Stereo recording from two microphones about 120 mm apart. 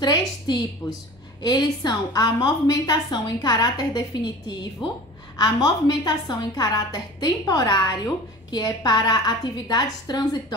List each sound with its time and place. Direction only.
0.5 s a woman's voice: 35° left (ahead or behind)